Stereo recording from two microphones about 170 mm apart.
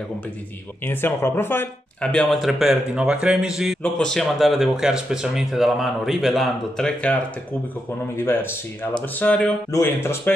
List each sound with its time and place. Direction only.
0.8 s speech: 15° left (ahead or behind)
8.2 s speech: 10° left (ahead or behind)
9.7 s speech: 20° left (ahead or behind)